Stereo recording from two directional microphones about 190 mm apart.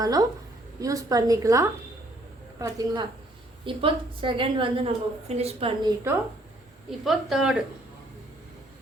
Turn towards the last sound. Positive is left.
turn(degrees=0)  # may be behind; listen again after turning